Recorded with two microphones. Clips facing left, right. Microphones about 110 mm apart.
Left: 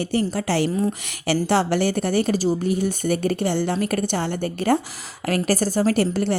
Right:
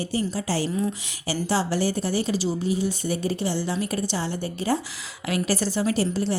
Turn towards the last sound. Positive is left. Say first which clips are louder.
# left 4 dB
turn(degrees=60)  # may be behind; listen again after turning